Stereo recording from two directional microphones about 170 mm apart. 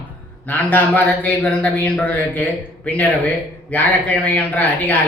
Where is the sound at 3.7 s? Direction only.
10° left (ahead or behind).